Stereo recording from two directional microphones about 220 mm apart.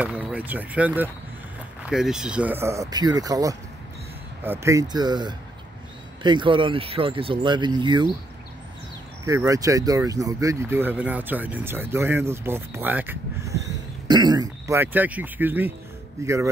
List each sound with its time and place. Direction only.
0.0 s speech: 5° right (ahead or behind)
9.5 s speech: 15° right (ahead or behind)